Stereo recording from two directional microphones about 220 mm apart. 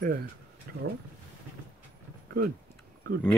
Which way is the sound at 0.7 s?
45° right (ahead or behind).